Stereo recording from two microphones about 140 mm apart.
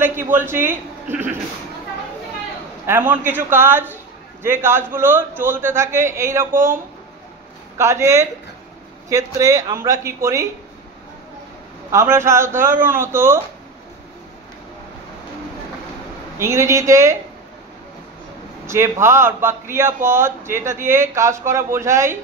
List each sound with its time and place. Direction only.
0.0 s a man's voice: 15° right (ahead or behind)
2.9 s a man's voice: 15° right (ahead or behind)
7.7 s a man's voice: 20° right (ahead or behind)
11.9 s a man's voice: 20° right (ahead or behind)
16.3 s a man's voice: 20° right (ahead or behind)
18.7 s a man's voice: 20° right (ahead or behind)